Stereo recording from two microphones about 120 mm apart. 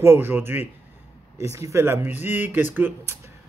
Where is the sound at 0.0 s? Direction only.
20° right (ahead or behind).